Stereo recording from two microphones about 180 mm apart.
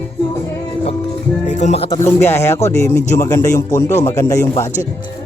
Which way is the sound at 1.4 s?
40° left (ahead or behind).